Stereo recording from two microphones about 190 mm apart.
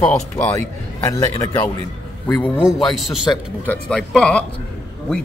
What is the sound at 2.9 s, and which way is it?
A man's voice, centre (ahead or behind).